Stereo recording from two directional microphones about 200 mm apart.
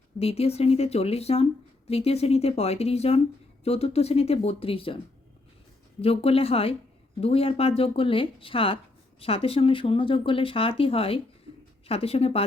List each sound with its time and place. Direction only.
0.2 s speech: 30° left (ahead or behind)
6.0 s speech: 30° left (ahead or behind)